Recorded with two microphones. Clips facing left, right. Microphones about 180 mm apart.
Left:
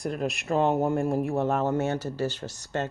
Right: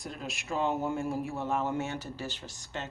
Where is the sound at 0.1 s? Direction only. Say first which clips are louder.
Left 8 dB; 60° left (ahead or behind).